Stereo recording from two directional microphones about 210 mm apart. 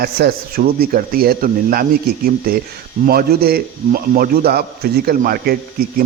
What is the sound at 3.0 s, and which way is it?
A man's voice, 45° right (ahead or behind).